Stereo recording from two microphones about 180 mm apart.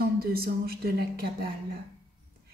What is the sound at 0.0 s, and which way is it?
Speech, 55° right (ahead or behind).